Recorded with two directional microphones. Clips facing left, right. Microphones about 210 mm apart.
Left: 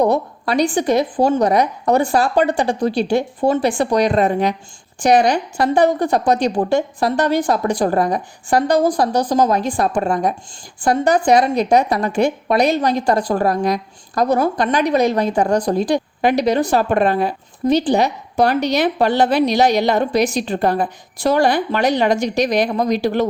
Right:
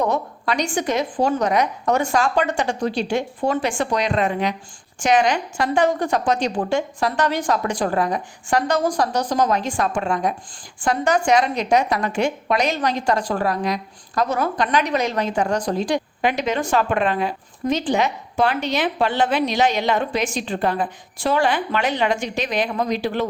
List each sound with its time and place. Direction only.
0.0 s a woman's voice: 35° left (ahead or behind)